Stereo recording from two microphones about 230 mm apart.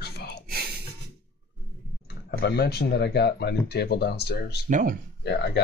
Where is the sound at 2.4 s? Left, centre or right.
Left.